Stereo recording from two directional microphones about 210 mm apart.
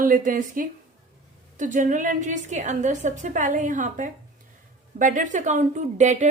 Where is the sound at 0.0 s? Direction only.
40° right (ahead or behind).